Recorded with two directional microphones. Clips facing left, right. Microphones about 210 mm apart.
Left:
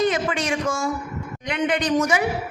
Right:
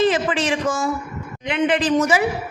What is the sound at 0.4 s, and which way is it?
A woman's voice, centre (ahead or behind).